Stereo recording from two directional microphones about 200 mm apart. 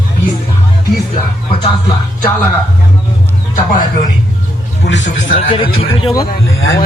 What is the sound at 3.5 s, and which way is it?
Speech, 45° left (ahead or behind).